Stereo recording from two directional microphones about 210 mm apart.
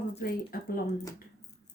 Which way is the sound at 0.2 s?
45° left (ahead or behind).